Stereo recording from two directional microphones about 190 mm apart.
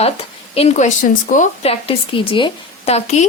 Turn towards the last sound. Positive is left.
turn(degrees=35)  # may be behind; listen again after turning